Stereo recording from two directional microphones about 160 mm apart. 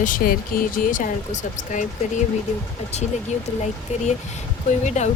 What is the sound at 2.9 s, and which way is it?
Speech, 45° left (ahead or behind).